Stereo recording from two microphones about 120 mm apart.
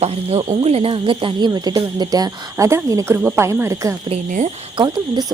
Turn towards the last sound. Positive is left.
turn(degrees=-35)  # may be behind; listen again after turning